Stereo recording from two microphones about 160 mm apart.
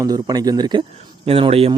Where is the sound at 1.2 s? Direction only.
35° right (ahead or behind).